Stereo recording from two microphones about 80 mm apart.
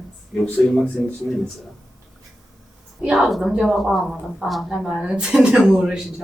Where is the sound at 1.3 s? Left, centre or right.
Centre.